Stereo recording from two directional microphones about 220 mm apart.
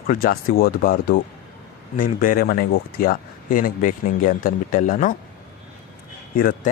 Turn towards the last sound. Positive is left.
turn(degrees=40)  # may be behind; listen again after turning